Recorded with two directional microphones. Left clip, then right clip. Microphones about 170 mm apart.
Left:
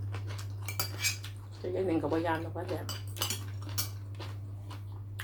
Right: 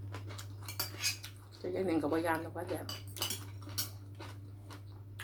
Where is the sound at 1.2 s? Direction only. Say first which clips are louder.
Left 3 dB; 25° right (ahead or behind).